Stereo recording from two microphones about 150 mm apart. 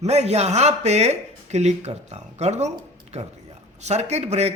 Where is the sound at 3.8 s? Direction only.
45° right (ahead or behind).